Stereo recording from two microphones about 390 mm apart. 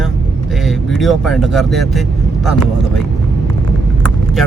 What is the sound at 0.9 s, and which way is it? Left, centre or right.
Speech, centre.